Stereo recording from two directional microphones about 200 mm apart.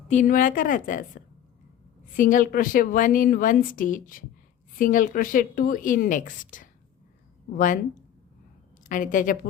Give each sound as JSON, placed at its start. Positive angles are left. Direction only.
{"t": 0.1, "sound": "a woman's voice", "side_deg": 40}
{"t": 8.9, "sound": "a woman's voice", "side_deg": 40}